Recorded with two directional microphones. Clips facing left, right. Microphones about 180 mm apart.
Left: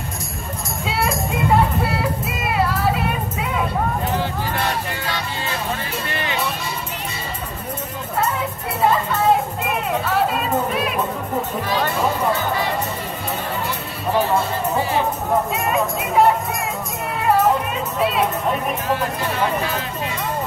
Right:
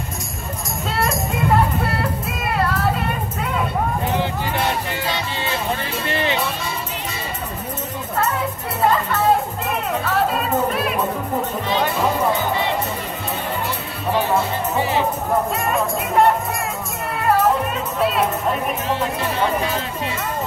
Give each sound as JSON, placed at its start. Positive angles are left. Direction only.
{"t": 0.8, "sound": "music", "side_deg": 5}
{"t": 4.6, "sound": "music", "side_deg": -20}
{"t": 9.6, "sound": "music", "side_deg": 0}
{"t": 15.5, "sound": "speech", "side_deg": 0}
{"t": 17.9, "sound": "speech", "side_deg": 0}